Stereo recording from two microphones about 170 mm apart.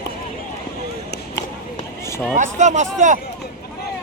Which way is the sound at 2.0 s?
15° left (ahead or behind).